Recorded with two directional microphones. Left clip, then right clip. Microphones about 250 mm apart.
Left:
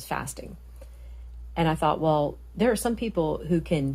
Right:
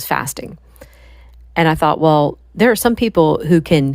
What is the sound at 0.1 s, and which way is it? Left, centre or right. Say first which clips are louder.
Speech: right 12 dB; right.